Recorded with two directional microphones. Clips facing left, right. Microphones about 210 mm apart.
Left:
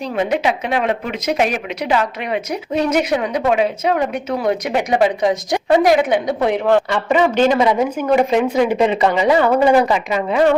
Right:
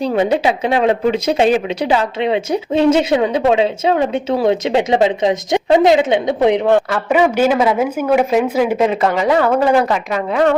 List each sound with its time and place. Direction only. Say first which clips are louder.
0.0 s a woman's voice: right 4 dB; 30° right (ahead or behind)
6.9 s a woman's voice: right 1 dB; 10° right (ahead or behind)